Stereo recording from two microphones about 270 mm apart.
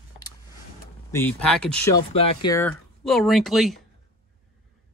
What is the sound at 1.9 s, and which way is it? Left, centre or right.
Speech, centre.